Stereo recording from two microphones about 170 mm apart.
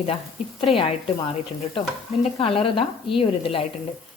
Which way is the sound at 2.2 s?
35° left (ahead or behind).